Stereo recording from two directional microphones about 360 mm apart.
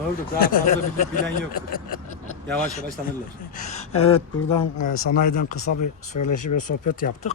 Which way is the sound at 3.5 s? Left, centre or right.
Centre.